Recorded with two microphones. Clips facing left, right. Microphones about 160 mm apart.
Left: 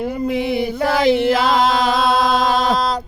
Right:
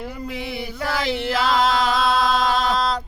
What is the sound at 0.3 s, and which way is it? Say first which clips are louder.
Chant: left 12 dB; 20° left (ahead or behind).